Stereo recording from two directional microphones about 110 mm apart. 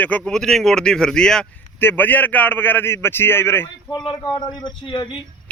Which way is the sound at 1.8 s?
20° left (ahead or behind).